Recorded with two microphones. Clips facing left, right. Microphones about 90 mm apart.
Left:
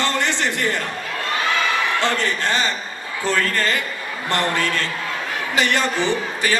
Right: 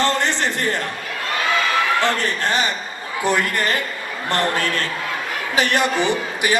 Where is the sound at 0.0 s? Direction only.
20° right (ahead or behind).